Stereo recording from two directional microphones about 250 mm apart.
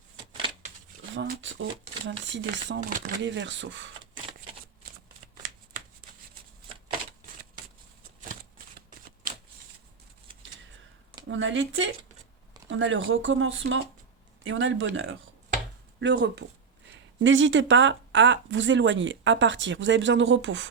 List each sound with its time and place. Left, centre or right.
1.1 s speech: right
11.3 s speech: right